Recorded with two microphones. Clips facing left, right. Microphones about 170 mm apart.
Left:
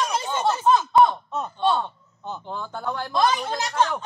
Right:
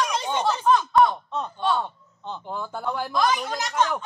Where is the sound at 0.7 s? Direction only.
25° left (ahead or behind).